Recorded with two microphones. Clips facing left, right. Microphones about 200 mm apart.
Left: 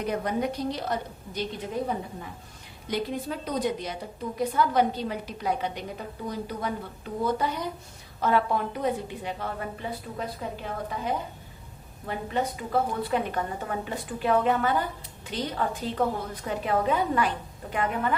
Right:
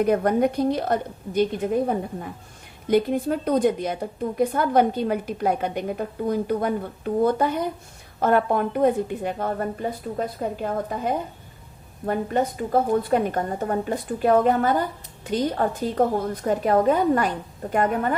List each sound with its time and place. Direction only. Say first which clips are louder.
0.0 s a woman's voice: right 8 dB; 55° right (ahead or behind)